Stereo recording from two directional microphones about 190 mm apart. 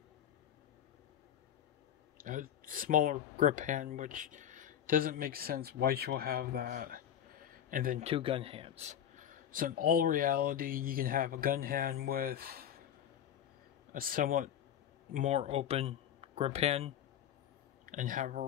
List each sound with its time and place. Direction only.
2.2 s speech: 45° right (ahead or behind)
8.0 s a man's voice: 30° right (ahead or behind); by 12.6 s 50° right (ahead or behind)
13.9 s a man's voice: 50° right (ahead or behind)
15.1 s speech: 35° right (ahead or behind)
17.8 s a man's voice: 45° right (ahead or behind)